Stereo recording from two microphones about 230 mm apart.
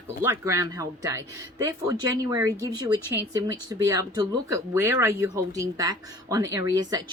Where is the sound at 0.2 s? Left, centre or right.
Centre.